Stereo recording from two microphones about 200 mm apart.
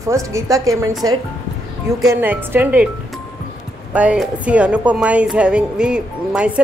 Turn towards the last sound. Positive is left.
turn(degrees=-5)  # may be behind; listen again after turning